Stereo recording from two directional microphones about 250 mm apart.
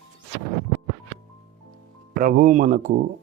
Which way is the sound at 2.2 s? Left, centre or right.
Right.